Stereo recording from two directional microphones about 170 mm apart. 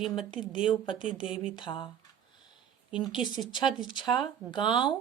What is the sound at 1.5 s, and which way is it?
Speech, 30° left (ahead or behind).